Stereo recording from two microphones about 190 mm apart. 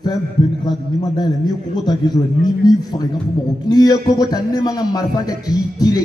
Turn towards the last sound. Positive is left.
turn(degrees=20)  # may be behind; listen again after turning